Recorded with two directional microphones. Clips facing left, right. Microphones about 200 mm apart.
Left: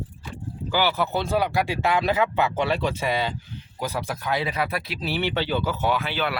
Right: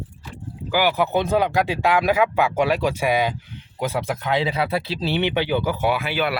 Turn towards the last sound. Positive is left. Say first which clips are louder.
# right 3 dB
turn(degrees=-10)  # may be behind; listen again after turning